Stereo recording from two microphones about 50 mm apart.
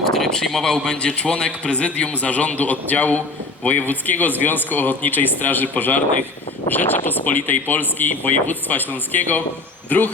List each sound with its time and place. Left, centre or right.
0.0 s a man's voice: centre; by 10.1 s left